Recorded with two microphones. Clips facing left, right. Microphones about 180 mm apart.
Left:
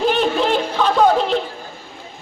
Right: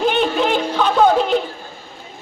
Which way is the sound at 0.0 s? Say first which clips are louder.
Even; centre (ahead or behind).